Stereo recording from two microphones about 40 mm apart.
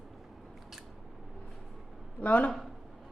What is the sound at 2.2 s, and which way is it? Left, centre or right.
Speech, left.